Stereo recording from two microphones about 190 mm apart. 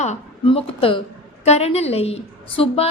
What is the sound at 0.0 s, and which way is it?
A woman's voice, 35° left (ahead or behind).